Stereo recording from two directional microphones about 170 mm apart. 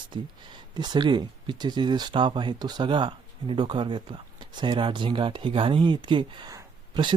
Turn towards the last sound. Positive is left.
turn(degrees=-25)  # may be behind; listen again after turning